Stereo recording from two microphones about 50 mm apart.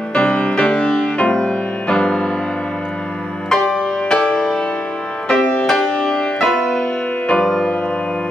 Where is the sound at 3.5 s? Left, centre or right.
Centre.